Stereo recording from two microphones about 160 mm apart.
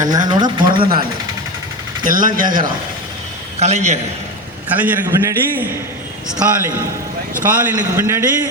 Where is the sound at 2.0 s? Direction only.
60° right (ahead or behind).